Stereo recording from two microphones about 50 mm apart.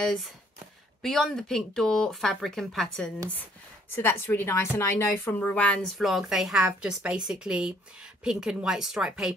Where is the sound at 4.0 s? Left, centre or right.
Left.